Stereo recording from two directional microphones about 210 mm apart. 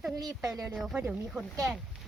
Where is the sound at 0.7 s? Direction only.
Centre (ahead or behind).